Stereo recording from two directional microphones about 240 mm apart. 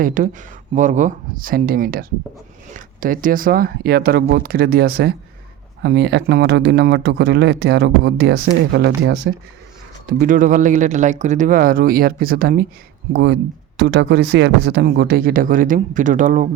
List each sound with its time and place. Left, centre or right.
0.0 s speech: right
10.1 s speech: right